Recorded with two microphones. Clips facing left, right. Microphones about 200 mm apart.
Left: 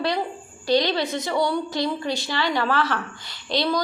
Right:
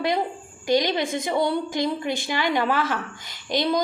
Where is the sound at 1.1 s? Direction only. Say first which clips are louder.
Right 1 dB; 50° right (ahead or behind).